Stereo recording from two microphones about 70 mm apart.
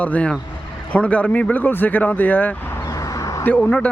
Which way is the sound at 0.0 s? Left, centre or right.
Centre.